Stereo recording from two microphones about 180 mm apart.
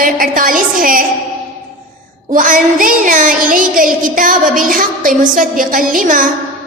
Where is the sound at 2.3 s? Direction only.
45° right (ahead or behind).